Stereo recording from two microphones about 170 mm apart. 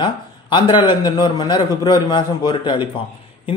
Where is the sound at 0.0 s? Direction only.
25° left (ahead or behind).